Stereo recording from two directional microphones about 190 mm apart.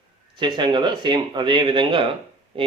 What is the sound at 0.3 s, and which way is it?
A man's voice, 25° right (ahead or behind).